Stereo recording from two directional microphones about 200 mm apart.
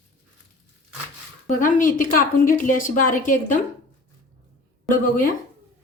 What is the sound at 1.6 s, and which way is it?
A woman's voice, 40° left (ahead or behind).